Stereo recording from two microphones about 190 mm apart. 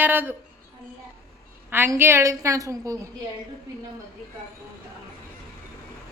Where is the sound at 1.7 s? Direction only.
10° right (ahead or behind).